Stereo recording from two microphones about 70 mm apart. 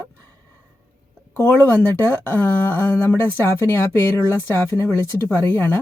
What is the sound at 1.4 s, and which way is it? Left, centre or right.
Speech, left.